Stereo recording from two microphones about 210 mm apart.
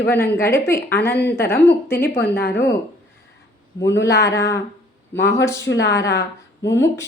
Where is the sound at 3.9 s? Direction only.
55° left (ahead or behind).